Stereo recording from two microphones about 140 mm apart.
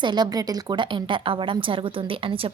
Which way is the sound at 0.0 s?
30° right (ahead or behind).